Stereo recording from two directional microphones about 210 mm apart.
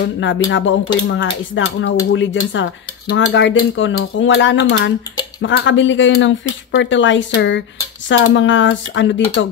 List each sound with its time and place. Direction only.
0.0 s speech: 60° left (ahead or behind)